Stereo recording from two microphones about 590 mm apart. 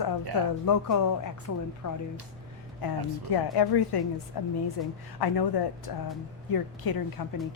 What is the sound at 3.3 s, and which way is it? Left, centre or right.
Speech, left.